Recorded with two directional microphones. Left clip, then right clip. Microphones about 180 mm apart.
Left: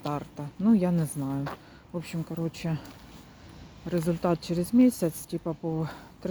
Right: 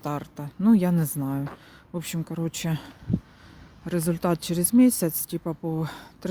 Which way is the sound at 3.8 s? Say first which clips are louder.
Right 1 dB; 45° right (ahead or behind).